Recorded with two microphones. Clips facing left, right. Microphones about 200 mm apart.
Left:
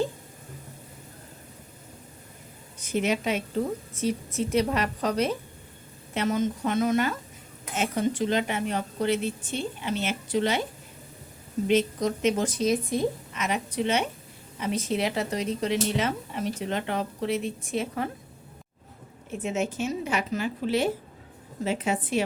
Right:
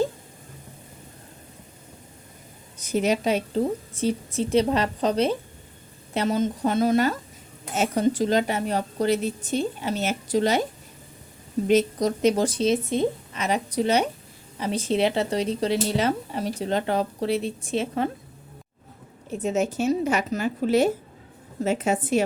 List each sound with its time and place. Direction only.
2.7 s speech: 40° right (ahead or behind)
11.7 s speech: 40° right (ahead or behind)
19.3 s a woman's voice: 35° right (ahead or behind)